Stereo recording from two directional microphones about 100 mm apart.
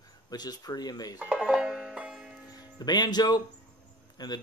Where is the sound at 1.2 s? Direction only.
10° right (ahead or behind).